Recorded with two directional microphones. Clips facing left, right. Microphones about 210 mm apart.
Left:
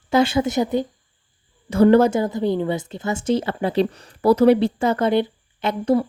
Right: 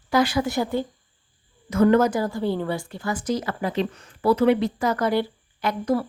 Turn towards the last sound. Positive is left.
turn(degrees=20)  # may be behind; listen again after turning